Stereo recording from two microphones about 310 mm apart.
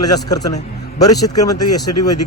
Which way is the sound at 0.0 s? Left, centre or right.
Centre.